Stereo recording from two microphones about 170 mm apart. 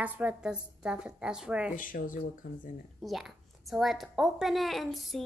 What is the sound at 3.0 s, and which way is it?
A woman's voice, centre (ahead or behind).